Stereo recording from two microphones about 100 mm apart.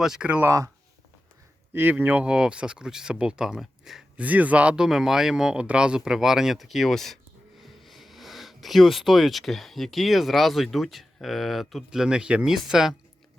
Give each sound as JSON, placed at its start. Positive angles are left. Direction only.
{"t": 0.0, "sound": "speech", "side_deg": -10}
{"t": 0.4, "sound": "speech", "side_deg": -30}
{"t": 1.7, "sound": "speech", "side_deg": -20}
{"t": 4.2, "sound": "speech", "side_deg": -15}